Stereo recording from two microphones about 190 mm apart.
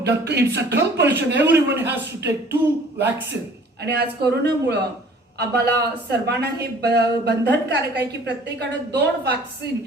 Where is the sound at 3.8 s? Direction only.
60° right (ahead or behind).